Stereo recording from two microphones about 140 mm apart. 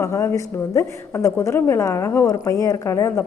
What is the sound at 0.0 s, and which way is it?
A woman's voice, 20° left (ahead or behind).